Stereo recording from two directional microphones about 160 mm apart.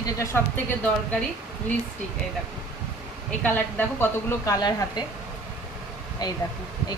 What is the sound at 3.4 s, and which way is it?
A woman's voice, 10° left (ahead or behind).